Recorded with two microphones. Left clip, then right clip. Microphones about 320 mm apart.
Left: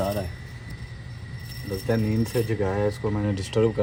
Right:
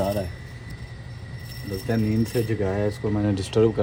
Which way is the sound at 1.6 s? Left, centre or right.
Centre.